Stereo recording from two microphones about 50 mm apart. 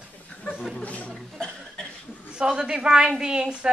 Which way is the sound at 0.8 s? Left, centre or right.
Left.